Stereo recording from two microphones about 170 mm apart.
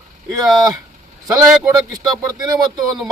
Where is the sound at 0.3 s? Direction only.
20° right (ahead or behind).